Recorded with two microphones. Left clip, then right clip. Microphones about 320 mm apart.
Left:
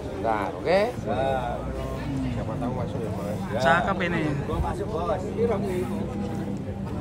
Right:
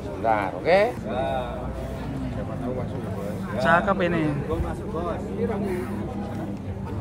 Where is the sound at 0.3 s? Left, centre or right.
Right.